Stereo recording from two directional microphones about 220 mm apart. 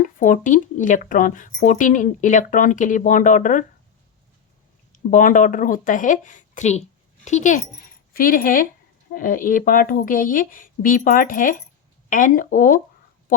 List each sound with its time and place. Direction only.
0.2 s speech: 35° left (ahead or behind)
4.9 s speech: 35° left (ahead or behind)